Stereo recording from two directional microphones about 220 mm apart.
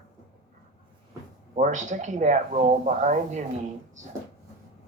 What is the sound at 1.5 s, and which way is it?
Speech, 35° right (ahead or behind).